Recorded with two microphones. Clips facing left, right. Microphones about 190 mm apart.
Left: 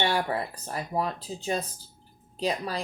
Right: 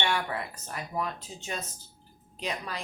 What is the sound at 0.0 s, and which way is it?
Speech, 35° left (ahead or behind).